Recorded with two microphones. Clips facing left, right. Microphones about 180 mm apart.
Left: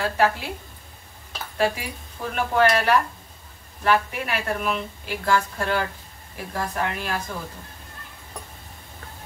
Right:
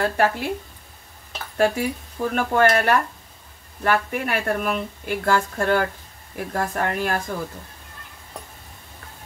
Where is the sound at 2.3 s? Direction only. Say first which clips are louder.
Right 1 dB; 50° right (ahead or behind).